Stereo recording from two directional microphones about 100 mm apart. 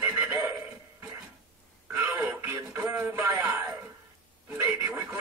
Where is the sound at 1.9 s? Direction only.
20° right (ahead or behind).